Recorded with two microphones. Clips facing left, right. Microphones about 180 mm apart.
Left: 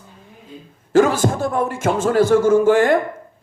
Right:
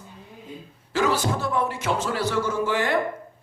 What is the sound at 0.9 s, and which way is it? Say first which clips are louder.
Speech: left 8 dB; 50° left (ahead or behind).